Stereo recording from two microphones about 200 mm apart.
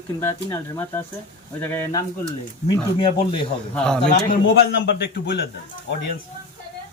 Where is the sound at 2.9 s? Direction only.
25° left (ahead or behind).